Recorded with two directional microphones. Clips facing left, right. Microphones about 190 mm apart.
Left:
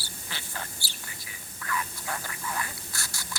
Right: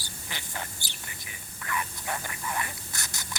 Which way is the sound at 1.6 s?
20° right (ahead or behind).